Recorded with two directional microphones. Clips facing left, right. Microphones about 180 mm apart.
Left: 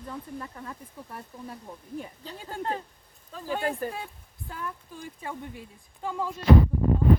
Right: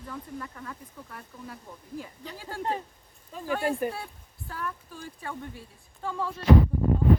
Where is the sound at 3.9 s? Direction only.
15° left (ahead or behind).